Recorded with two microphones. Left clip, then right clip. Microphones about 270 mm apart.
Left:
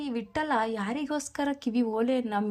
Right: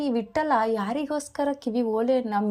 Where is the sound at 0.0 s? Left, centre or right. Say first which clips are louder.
Right 6 dB; left.